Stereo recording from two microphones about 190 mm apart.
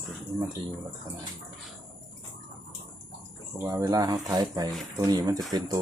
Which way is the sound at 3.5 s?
15° right (ahead or behind).